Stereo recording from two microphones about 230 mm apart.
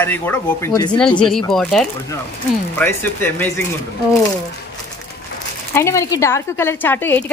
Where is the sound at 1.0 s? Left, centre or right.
Centre.